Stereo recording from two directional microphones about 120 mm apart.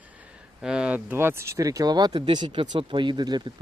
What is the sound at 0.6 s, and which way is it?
Speech, 5° right (ahead or behind).